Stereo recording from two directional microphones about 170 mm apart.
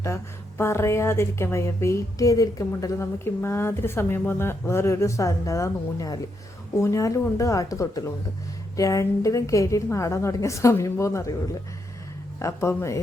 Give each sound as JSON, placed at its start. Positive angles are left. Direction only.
{"t": 0.0, "sound": "a woman's voice", "side_deg": 15}
{"t": 12.4, "sound": "speech", "side_deg": 15}